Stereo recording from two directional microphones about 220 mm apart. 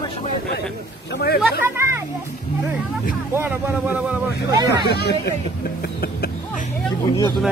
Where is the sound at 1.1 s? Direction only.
45° left (ahead or behind).